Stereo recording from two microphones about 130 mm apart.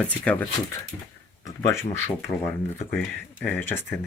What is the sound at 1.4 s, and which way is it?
Speech, 25° left (ahead or behind).